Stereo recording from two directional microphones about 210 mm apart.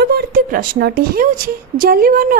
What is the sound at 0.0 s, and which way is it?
A woman's voice, 45° right (ahead or behind).